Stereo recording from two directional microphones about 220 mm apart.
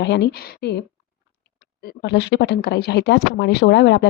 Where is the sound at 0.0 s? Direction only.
50° left (ahead or behind).